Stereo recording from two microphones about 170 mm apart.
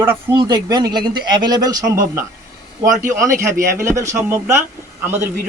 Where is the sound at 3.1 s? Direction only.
15° right (ahead or behind).